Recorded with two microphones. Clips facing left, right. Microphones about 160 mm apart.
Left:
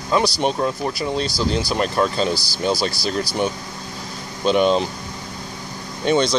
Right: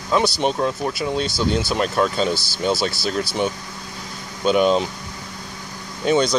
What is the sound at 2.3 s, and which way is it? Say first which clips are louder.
Speech: left 1 dB; 40° left (ahead or behind).